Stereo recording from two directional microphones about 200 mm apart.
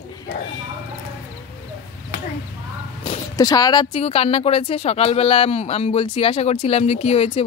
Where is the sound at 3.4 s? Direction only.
20° left (ahead or behind).